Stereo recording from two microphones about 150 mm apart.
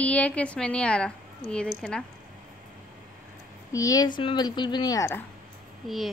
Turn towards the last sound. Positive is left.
turn(degrees=0)  # may be behind; listen again after turning